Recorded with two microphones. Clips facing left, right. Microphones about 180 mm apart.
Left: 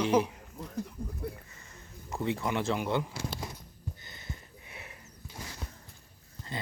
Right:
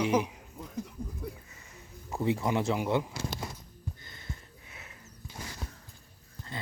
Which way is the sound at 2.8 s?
5° right (ahead or behind).